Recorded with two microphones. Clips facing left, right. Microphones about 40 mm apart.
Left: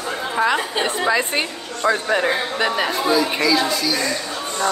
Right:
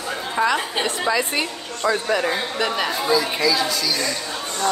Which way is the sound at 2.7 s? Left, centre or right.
Centre.